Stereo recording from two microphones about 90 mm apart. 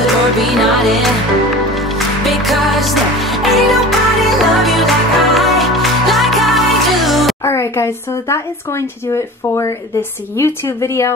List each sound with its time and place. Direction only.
0.0 s music: centre (ahead or behind)
7.4 s speech: 30° left (ahead or behind)